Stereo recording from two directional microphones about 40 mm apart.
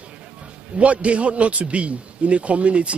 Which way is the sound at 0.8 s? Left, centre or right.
Right.